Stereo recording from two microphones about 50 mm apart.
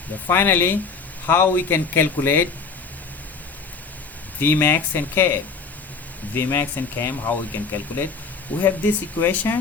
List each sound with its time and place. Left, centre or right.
0.3 s speech: left
4.4 s speech: left